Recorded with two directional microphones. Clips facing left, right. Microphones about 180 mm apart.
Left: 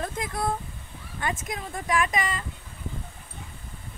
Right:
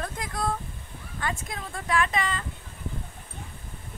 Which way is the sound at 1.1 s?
20° left (ahead or behind).